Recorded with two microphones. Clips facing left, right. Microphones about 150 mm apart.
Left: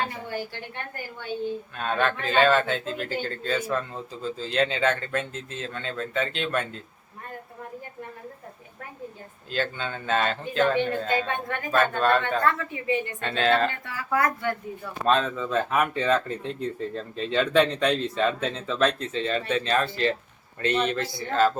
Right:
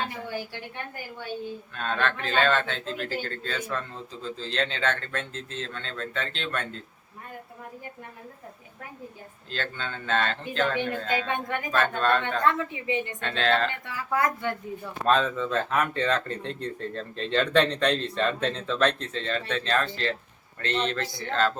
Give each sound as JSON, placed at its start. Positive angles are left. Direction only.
{"t": 0.3, "sound": "a woman's voice", "side_deg": -10}
{"t": 1.7, "sound": "speech", "side_deg": 10}
{"t": 9.5, "sound": "speech", "side_deg": 10}
{"t": 11.3, "sound": "a woman's voice", "side_deg": -15}
{"t": 11.7, "sound": "speech", "side_deg": 10}
{"t": 12.4, "sound": "a woman's voice", "side_deg": -20}
{"t": 13.2, "sound": "speech", "side_deg": 10}
{"t": 13.7, "sound": "speech", "side_deg": -20}
{"t": 15.0, "sound": "speech", "side_deg": 0}